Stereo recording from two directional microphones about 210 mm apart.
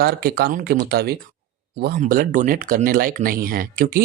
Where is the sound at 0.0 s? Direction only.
50° right (ahead or behind).